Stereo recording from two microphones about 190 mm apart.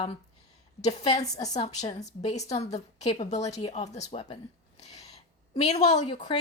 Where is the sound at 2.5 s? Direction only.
35° left (ahead or behind).